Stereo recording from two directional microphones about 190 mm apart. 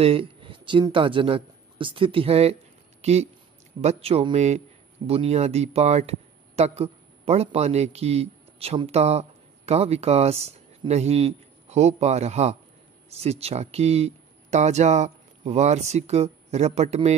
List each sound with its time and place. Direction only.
0.0 s speech: 30° right (ahead or behind)